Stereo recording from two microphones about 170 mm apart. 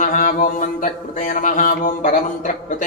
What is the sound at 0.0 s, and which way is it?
Speech, 50° left (ahead or behind).